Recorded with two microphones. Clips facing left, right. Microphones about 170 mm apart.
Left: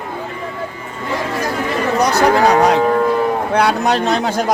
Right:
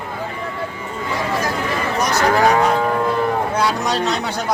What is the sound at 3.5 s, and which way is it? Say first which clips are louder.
Speech: left 4 dB; 60° left (ahead or behind).